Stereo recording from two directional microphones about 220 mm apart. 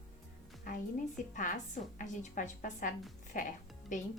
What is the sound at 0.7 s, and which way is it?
A woman's voice, 35° left (ahead or behind).